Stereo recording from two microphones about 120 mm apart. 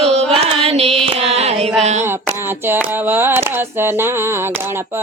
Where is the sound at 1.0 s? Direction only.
55° right (ahead or behind).